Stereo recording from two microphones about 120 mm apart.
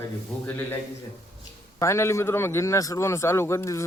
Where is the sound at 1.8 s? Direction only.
25° left (ahead or behind).